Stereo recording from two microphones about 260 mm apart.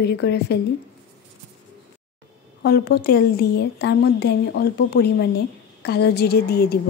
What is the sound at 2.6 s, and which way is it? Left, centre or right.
Speech, left.